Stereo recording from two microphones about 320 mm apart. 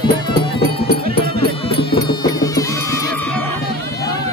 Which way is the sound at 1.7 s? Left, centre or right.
Centre.